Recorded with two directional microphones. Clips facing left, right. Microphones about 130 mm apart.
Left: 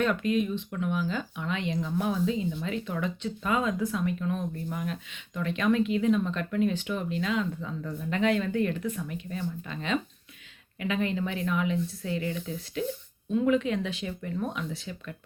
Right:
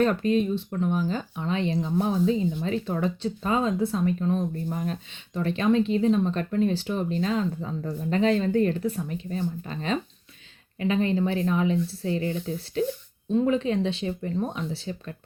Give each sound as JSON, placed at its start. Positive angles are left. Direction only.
{"t": 0.0, "sound": "speech", "side_deg": -35}